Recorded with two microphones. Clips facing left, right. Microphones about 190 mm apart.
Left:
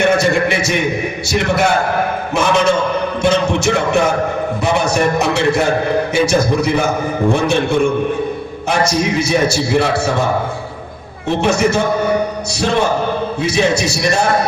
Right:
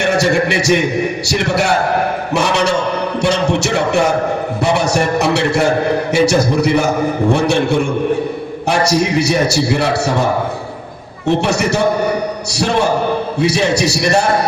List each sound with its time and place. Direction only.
0.2 s a sound: 70° right (ahead or behind)
2.3 s a man's voice: 70° right (ahead or behind)
8.9 s a man's voice: 65° right (ahead or behind)
11.4 s a man's voice: 65° right (ahead or behind)
13.4 s a man's voice: 65° right (ahead or behind)